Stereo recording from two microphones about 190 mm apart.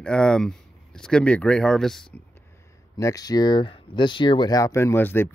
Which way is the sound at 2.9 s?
20° left (ahead or behind).